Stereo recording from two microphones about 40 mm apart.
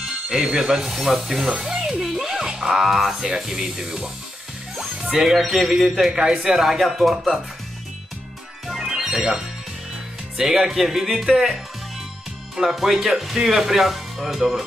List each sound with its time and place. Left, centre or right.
0.0 s a man's voice: centre
2.0 s music: centre
2.4 s a man's voice: centre
8.6 s music: centre
10.3 s a man's voice: centre
12.5 s a man's voice: centre